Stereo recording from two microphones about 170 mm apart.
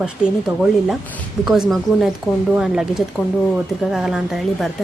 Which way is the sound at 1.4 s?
Centre (ahead or behind).